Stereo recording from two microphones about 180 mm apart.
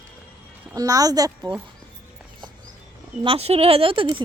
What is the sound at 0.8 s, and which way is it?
Speech, 20° right (ahead or behind).